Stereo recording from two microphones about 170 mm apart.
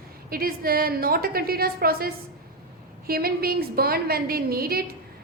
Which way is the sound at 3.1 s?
60° right (ahead or behind).